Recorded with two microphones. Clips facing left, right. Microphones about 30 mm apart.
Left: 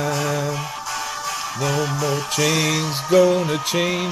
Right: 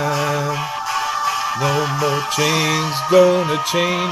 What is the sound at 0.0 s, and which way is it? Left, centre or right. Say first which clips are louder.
Music: right 3 dB; centre.